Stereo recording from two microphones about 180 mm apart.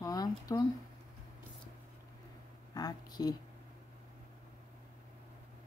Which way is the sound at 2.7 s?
20° left (ahead or behind).